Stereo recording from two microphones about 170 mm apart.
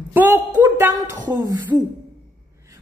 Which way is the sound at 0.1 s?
10° right (ahead or behind).